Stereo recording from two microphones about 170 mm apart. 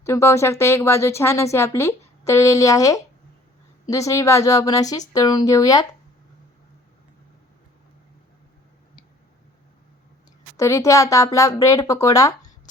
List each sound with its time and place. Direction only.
0.0 s speech: 15° left (ahead or behind)
10.6 s speech: 15° left (ahead or behind)